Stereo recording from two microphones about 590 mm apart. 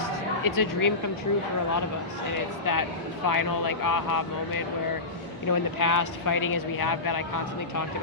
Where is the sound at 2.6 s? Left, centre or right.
Left.